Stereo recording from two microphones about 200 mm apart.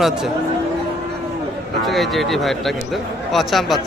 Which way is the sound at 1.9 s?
Centre (ahead or behind).